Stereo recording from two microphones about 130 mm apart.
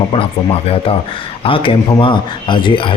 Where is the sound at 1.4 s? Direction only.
45° left (ahead or behind).